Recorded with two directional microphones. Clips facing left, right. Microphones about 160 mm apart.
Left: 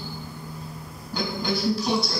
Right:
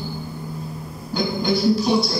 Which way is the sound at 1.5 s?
10° right (ahead or behind).